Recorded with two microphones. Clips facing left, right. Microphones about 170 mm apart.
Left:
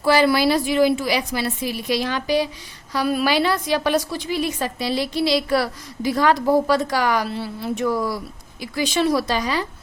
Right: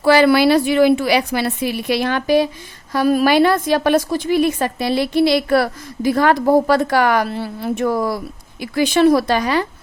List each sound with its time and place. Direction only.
0.0 s a woman's voice: 65° right (ahead or behind)